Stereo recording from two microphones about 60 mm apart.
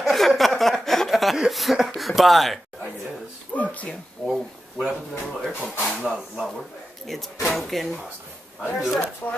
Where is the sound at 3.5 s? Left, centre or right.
Left.